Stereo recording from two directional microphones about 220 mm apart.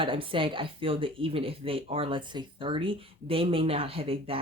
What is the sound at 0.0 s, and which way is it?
Speech, 25° right (ahead or behind).